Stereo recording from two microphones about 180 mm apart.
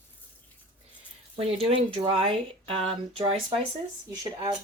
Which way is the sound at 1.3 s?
30° right (ahead or behind).